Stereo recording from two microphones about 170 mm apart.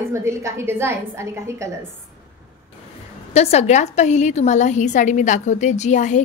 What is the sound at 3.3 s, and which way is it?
Speech, 40° left (ahead or behind).